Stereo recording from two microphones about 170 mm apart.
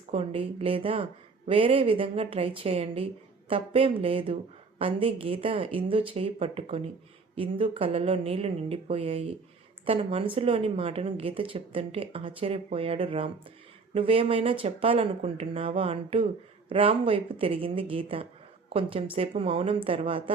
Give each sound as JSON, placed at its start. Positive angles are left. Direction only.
{"t": 0.1, "sound": "speech", "side_deg": -35}